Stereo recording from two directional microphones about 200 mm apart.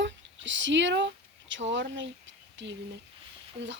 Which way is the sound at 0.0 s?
65° right (ahead or behind).